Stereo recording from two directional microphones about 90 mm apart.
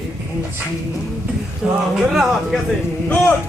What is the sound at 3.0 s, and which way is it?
Speech, 20° left (ahead or behind).